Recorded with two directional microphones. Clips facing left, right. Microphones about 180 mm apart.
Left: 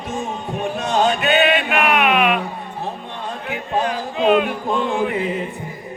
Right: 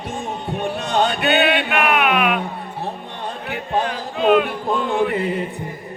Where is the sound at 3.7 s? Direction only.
Centre (ahead or behind).